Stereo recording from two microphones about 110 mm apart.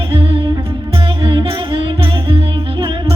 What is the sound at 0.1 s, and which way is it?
Music, 55° right (ahead or behind).